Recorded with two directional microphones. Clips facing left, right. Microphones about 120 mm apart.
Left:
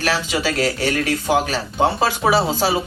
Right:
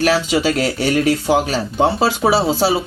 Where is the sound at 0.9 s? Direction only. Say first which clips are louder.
Right 4 dB; 35° right (ahead or behind).